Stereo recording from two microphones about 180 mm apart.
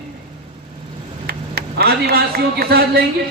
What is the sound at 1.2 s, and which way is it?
Speech, 60° right (ahead or behind).